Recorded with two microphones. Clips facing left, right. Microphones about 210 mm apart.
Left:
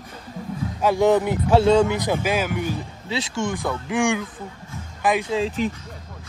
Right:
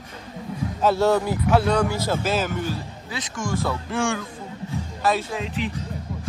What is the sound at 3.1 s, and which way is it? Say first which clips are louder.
Speech: left 3 dB; 25° left (ahead or behind).